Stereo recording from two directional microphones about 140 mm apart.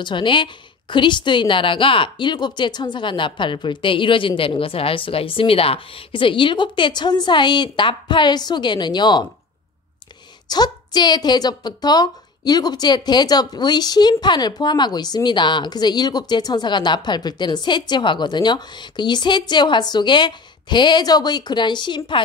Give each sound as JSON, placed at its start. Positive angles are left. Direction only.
{"t": 0.0, "sound": "a woman's voice", "side_deg": 35}
{"t": 10.5, "sound": "a woman's voice", "side_deg": 30}